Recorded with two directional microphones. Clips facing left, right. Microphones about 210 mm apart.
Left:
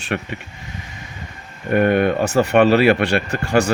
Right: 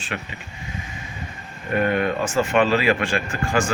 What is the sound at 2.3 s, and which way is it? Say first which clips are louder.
Speech: left 6 dB; 65° left (ahead or behind).